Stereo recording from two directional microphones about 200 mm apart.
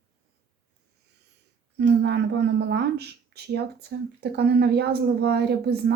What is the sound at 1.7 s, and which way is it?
A woman's voice, 60° right (ahead or behind).